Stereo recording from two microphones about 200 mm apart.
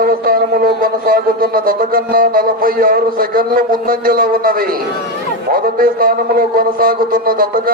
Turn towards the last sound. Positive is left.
turn(degrees=-45)  # may be behind; listen again after turning